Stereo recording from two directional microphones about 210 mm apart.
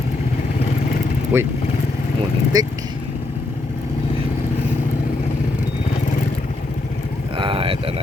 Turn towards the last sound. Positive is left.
turn(degrees=-25)  # may be behind; listen again after turning